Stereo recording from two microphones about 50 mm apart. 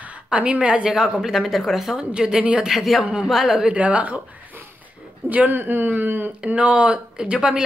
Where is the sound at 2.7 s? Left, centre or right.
Centre.